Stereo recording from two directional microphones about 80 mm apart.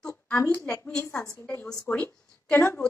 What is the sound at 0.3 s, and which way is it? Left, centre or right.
Speech, centre.